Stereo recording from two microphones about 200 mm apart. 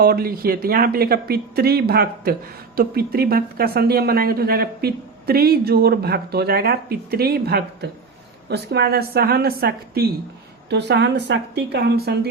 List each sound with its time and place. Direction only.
0.0 s a woman's voice: 50° right (ahead or behind)